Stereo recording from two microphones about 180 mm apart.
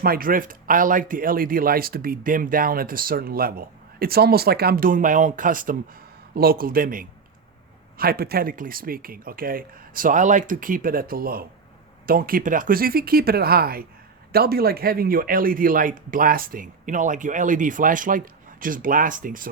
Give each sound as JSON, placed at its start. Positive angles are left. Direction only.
{"t": 0.0, "sound": "speech", "side_deg": -55}